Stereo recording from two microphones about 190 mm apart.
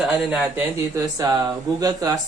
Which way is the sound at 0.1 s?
10° right (ahead or behind).